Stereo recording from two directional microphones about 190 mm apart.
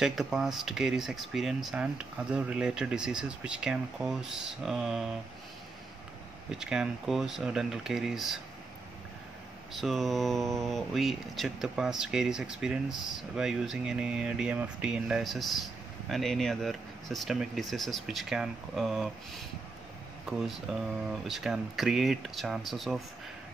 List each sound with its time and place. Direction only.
0.0 s speech: centre (ahead or behind)
6.6 s speech: 5° right (ahead or behind)
9.8 s speech: centre (ahead or behind)
20.2 s speech: centre (ahead or behind)